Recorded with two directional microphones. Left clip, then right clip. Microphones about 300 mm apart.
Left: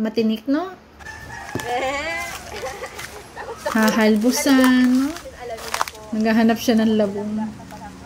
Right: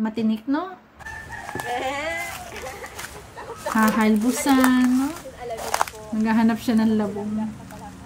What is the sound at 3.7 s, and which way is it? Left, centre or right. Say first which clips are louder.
Speech: left 3 dB; centre.